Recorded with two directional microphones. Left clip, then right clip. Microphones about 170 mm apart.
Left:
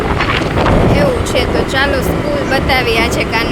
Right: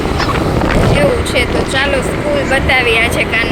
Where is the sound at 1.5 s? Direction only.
Centre (ahead or behind).